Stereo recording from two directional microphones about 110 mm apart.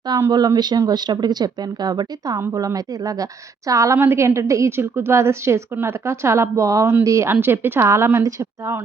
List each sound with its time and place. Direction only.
0.2 s a woman's voice: 35° right (ahead or behind)